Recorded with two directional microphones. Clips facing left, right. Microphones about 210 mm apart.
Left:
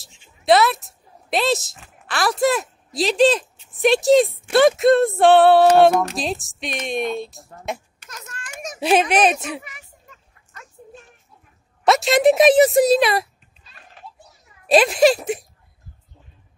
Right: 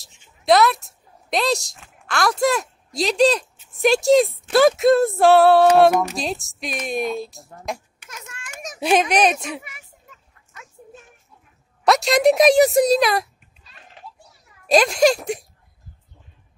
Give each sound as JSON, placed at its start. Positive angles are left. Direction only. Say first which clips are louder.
{"t": 0.0, "sound": "a woman's voice", "louder": "left 1 dB", "side_deg": 0}
{"t": 11.8, "sound": "speech", "louder": "left 1 dB", "side_deg": 0}
{"t": 14.7, "sound": "speech", "louder": "left 1 dB", "side_deg": 5}